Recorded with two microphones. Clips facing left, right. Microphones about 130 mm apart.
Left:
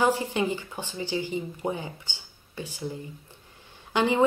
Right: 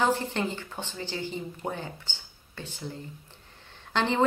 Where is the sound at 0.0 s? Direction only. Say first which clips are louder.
Left 2 dB; 10° left (ahead or behind).